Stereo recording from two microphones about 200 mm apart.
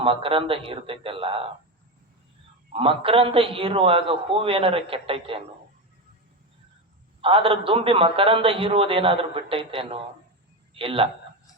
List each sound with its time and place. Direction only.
0.0 s a man's voice: 25° right (ahead or behind)
2.7 s a man's voice: 25° right (ahead or behind)
7.2 s a man's voice: 25° right (ahead or behind)